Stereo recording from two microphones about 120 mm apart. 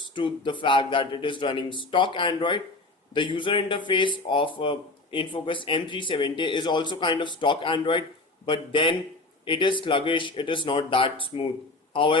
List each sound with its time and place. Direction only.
0.1 s speech: 40° left (ahead or behind)